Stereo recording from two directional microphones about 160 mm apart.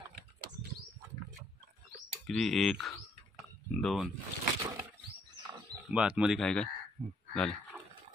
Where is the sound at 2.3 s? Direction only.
Centre (ahead or behind).